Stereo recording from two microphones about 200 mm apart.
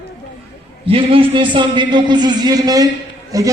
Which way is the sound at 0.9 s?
25° right (ahead or behind).